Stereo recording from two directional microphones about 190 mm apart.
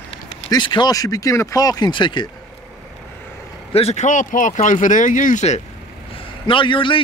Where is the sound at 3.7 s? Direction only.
35° left (ahead or behind).